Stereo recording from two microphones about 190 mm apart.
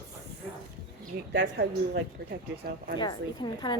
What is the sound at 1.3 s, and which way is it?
Speech, 65° right (ahead or behind).